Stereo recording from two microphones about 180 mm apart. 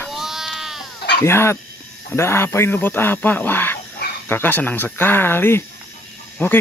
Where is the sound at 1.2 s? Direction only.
15° left (ahead or behind).